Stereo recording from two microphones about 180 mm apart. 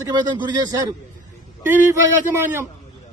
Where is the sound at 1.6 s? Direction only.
15° right (ahead or behind).